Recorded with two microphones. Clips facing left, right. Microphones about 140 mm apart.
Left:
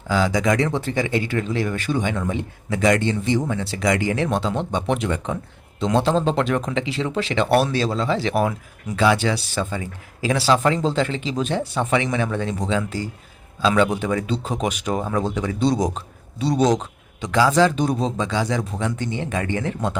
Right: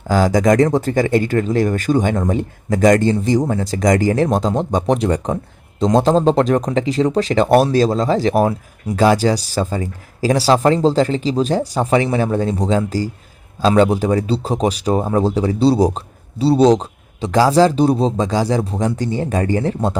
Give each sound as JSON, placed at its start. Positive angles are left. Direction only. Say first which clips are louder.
{"t": 0.1, "sound": "speech", "louder": "right 6 dB", "side_deg": -45}